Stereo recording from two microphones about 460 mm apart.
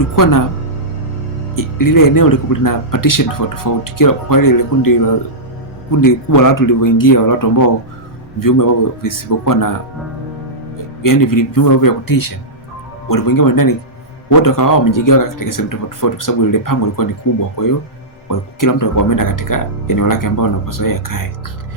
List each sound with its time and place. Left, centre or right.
0.2 s speech: left
1.5 s speech: left
6.0 s speech: left
11.0 s speech: left
18.3 s speech: left